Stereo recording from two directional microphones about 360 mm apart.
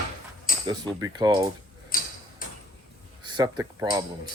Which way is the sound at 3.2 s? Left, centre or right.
Centre.